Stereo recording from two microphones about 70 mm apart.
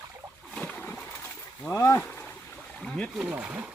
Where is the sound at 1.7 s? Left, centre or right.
Left.